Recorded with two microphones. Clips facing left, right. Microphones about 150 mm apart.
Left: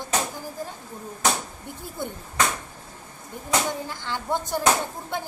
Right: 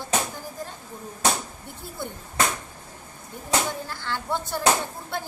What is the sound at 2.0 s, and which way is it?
Speech, 15° left (ahead or behind).